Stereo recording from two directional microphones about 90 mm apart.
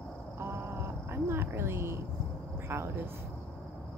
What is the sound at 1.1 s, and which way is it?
Cricket, 25° right (ahead or behind).